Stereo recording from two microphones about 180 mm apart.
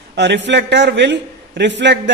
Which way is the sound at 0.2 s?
75° right (ahead or behind).